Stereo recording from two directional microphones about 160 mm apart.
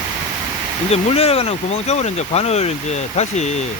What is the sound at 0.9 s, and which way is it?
Speech, 40° left (ahead or behind).